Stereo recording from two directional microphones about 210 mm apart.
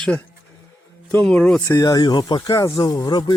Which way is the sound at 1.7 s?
15° left (ahead or behind).